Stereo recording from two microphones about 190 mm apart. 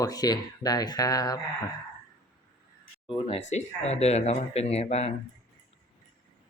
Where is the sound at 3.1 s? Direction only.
30° left (ahead or behind).